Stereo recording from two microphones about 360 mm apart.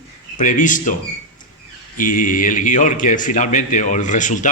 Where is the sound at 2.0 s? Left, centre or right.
Left.